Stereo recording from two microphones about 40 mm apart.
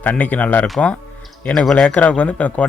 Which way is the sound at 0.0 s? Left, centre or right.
Left.